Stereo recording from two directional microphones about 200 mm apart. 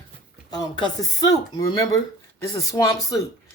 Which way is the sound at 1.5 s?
20° left (ahead or behind).